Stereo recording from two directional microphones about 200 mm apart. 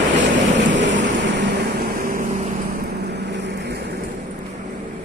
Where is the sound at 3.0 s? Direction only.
60° right (ahead or behind).